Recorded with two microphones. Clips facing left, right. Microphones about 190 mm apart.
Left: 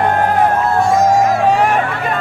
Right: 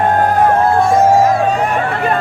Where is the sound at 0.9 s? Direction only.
30° right (ahead or behind).